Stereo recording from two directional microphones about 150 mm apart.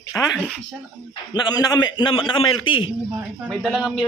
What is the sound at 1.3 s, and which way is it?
A man's voice, 25° left (ahead or behind).